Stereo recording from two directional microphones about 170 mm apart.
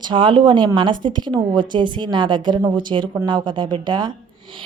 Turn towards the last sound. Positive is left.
turn(degrees=-25)  # may be behind; listen again after turning